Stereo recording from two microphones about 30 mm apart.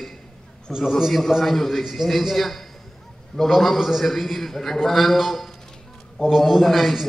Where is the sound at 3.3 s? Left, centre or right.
Left.